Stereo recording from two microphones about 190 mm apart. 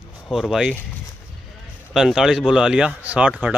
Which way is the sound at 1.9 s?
Centre (ahead or behind).